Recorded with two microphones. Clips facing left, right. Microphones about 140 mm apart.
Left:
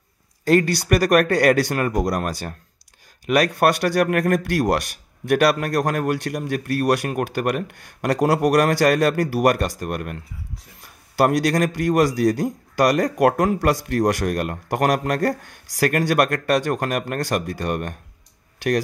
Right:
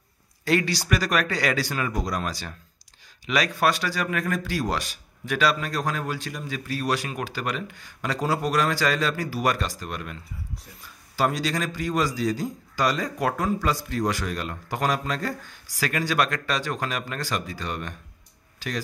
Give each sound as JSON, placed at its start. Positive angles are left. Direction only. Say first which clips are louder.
{"t": 0.5, "sound": "a man's voice", "louder": "left 6 dB", "side_deg": 50}
{"t": 18.6, "sound": "speech", "louder": "left 12 dB", "side_deg": 65}